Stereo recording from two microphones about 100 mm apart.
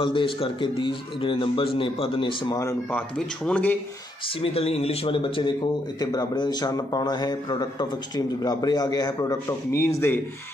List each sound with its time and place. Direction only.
0.0 s speech: 60° left (ahead or behind)
2.9 s speech: 10° left (ahead or behind)
4.4 s speech: 85° left; by 5.5 s 60° left (ahead or behind)
5.9 s a man's voice: 45° left (ahead or behind); by 10.2 s 25° left (ahead or behind)